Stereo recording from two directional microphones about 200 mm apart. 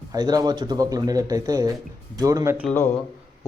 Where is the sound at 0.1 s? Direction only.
20° right (ahead or behind).